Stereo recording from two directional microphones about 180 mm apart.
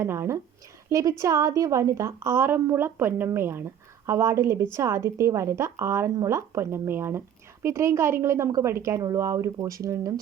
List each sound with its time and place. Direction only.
0.0 s a woman's voice: 15° right (ahead or behind)